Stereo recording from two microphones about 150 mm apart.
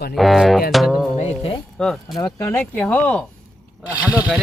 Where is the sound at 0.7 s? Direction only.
Centre (ahead or behind).